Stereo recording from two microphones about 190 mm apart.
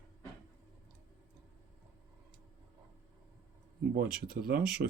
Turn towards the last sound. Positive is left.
turn(degrees=-50)  # may be behind; listen again after turning